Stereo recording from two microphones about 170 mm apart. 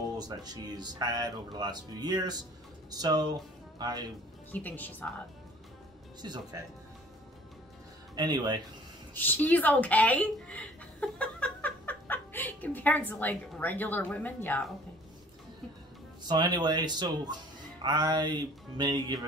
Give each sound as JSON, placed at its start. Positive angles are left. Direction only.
{"t": 0.2, "sound": "speech", "side_deg": -25}
{"t": 4.5, "sound": "speech", "side_deg": 10}
{"t": 6.2, "sound": "speech", "side_deg": -25}
{"t": 8.2, "sound": "speech", "side_deg": -25}
{"t": 9.1, "sound": "a woman's voice", "side_deg": 10}
{"t": 16.3, "sound": "speech", "side_deg": -25}